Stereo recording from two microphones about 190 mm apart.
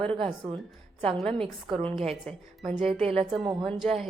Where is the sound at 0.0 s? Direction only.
30° right (ahead or behind).